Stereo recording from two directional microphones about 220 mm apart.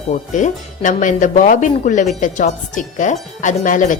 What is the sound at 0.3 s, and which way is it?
Speech, 35° left (ahead or behind).